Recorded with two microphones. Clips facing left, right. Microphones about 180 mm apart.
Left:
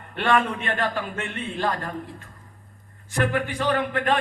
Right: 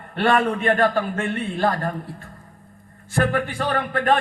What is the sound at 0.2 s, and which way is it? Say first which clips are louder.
A man's voice: right 3 dB; 40° right (ahead or behind).